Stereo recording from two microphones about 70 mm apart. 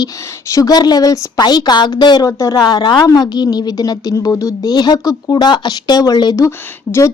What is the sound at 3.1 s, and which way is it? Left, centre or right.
A woman's voice, left.